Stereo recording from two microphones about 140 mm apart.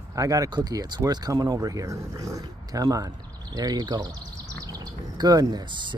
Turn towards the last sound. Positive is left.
turn(degrees=-30)  # may be behind; listen again after turning